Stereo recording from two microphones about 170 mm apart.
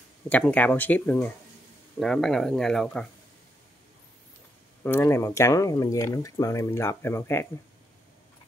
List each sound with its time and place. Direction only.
0.3 s speech: 10° left (ahead or behind)
4.8 s speech: 15° left (ahead or behind)